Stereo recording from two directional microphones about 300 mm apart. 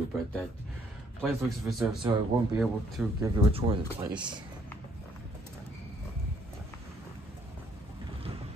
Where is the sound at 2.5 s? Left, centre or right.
Centre.